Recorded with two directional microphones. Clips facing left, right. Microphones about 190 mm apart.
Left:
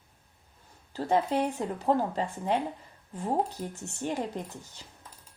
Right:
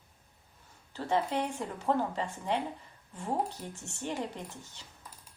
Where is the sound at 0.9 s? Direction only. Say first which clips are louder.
Left 4 dB; 40° left (ahead or behind).